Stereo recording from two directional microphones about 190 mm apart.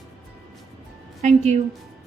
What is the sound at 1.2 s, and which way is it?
Speech, 35° right (ahead or behind).